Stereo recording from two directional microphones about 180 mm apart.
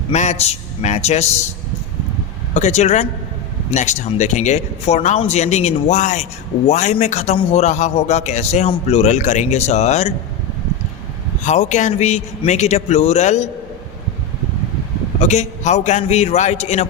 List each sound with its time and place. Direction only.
0.1 s a man's voice: 40° left (ahead or behind)
2.5 s a man's voice: 40° left (ahead or behind)
11.4 s a man's voice: 40° left (ahead or behind)
15.2 s a man's voice: 40° left (ahead or behind)